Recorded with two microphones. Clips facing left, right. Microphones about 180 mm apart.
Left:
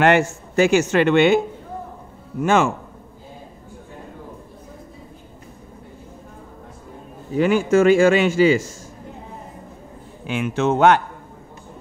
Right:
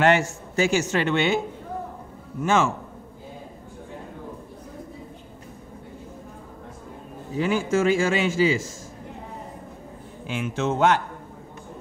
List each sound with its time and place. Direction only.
0.0 s a man's voice: 60° left (ahead or behind)
2.4 s a man's voice: 60° left (ahead or behind)
7.3 s a man's voice: 65° left (ahead or behind)
10.2 s a man's voice: 65° left (ahead or behind)